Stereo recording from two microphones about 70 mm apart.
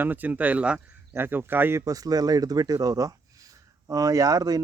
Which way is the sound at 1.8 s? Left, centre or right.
Right.